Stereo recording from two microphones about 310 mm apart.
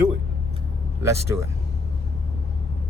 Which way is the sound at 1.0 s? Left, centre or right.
Centre.